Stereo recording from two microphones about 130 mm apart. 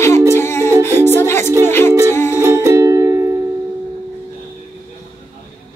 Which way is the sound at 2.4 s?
20° right (ahead or behind).